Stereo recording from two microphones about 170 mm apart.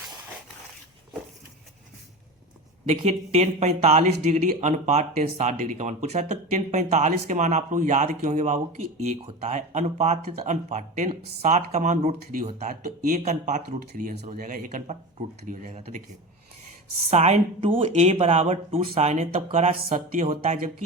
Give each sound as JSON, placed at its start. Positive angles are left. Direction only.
{"t": 3.0, "sound": "speech", "side_deg": -35}
{"t": 13.7, "sound": "speech", "side_deg": -70}
{"t": 14.3, "sound": "speech", "side_deg": -55}
{"t": 17.1, "sound": "speech", "side_deg": -40}